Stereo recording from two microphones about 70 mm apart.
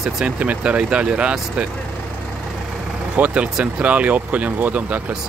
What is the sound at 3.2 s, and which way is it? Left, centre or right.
Speech, right.